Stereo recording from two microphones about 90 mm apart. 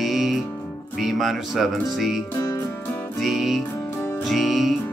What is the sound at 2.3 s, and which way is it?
Music, 30° left (ahead or behind).